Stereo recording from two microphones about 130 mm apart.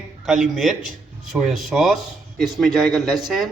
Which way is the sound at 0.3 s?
Centre (ahead or behind).